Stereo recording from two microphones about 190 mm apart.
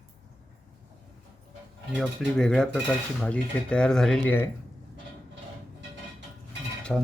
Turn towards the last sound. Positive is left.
turn(degrees=5)  # may be behind; listen again after turning